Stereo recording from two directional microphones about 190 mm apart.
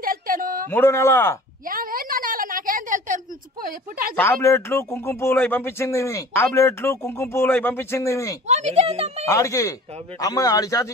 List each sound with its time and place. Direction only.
0.0 s a sound: 45° right (ahead or behind)
0.7 s a man's voice: 10° left (ahead or behind)
1.7 s a sound: 50° right (ahead or behind)
4.2 s a man's voice: 15° left (ahead or behind)
8.5 s a woman's voice: 35° right (ahead or behind)
9.3 s a man's voice: 15° left (ahead or behind)